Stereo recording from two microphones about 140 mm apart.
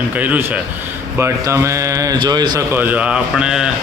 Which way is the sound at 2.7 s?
15° right (ahead or behind).